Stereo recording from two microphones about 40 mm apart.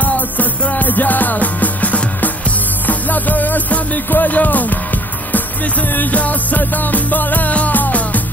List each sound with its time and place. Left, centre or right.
0.0 s music: left
5.9 s music: left